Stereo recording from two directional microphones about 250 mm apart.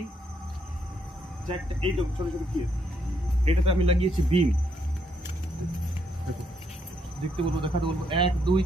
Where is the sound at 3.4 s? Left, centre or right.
Right.